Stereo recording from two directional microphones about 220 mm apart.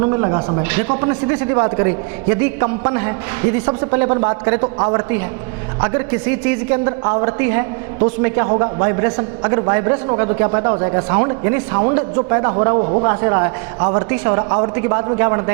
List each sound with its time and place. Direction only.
0.0 s a man's voice: 20° right (ahead or behind)
6.8 s a man's voice: 25° right (ahead or behind)
13.1 s a man's voice: 15° right (ahead or behind)